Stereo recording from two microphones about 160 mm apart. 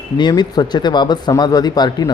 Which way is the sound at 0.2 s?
25° left (ahead or behind).